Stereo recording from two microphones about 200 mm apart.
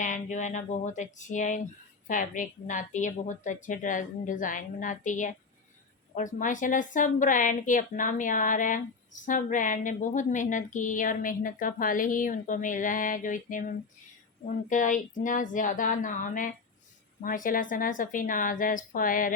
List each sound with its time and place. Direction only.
0.0 s a woman's voice: 40° left (ahead or behind)